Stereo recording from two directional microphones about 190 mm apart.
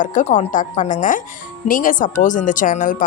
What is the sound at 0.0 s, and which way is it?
Speech, 40° left (ahead or behind).